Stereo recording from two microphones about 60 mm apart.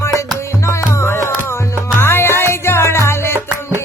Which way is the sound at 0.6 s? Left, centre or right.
Left.